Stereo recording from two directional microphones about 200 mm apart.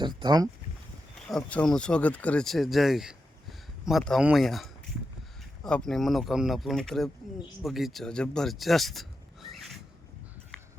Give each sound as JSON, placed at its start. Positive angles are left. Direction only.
{"t": 0.2, "sound": "speech", "side_deg": -20}
{"t": 1.3, "sound": "speech", "side_deg": 5}